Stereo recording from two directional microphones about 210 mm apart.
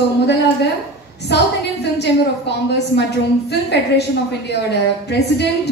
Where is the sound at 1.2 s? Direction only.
55° left (ahead or behind).